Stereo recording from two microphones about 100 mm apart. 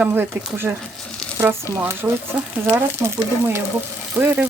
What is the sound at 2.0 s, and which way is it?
Speech, 20° right (ahead or behind).